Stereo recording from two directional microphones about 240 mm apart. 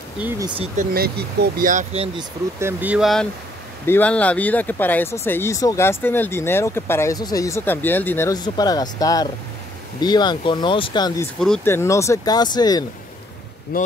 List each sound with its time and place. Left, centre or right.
0.2 s speech: centre
0.9 s speech: right
2.1 s speech: centre
11.3 s speech: centre
13.7 s speech: left